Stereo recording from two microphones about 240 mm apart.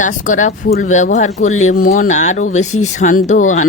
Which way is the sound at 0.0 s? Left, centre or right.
Left.